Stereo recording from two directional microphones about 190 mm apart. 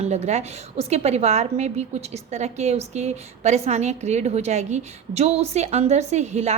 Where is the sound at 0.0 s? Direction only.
35° right (ahead or behind).